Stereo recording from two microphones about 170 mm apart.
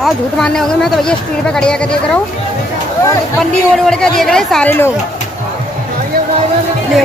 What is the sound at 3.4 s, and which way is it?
A woman's voice, 5° left (ahead or behind).